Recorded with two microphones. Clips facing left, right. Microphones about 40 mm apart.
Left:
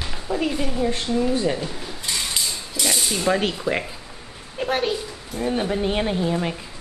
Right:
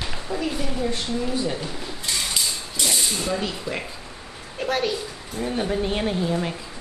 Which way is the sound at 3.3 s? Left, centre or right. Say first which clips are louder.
Left 10 dB; left.